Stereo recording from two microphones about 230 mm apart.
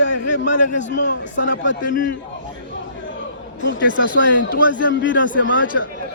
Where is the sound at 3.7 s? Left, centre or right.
Right.